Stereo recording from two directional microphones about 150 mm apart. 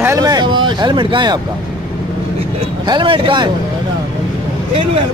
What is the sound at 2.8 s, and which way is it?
Speech, 30° right (ahead or behind).